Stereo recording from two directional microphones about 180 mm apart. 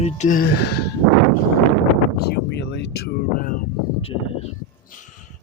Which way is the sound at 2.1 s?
65° left (ahead or behind).